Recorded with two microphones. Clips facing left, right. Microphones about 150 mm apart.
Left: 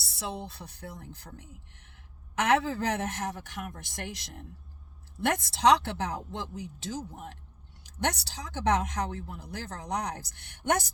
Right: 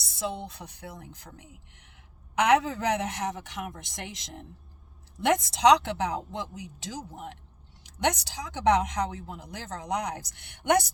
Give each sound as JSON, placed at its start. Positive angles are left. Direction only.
{"t": 0.0, "sound": "speech", "side_deg": -20}
{"t": 7.9, "sound": "speech", "side_deg": -15}